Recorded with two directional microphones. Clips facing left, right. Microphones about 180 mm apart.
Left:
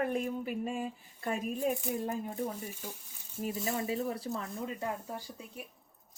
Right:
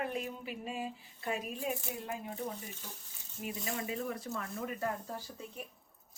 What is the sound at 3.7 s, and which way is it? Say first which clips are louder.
Speech: left 4 dB; 35° left (ahead or behind).